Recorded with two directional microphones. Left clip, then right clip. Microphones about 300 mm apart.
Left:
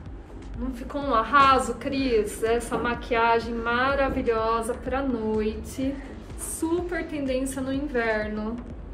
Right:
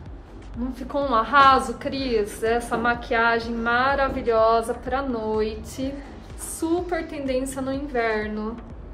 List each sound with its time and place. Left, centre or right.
0.7 s a woman's voice: right
6.9 s a woman's voice: right